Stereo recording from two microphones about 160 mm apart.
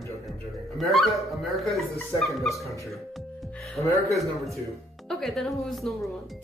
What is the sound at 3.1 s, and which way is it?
Music, centre (ahead or behind).